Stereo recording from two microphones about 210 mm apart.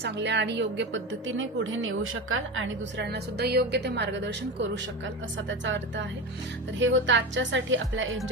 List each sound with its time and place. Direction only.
0.0 s a woman's voice: 55° right (ahead or behind)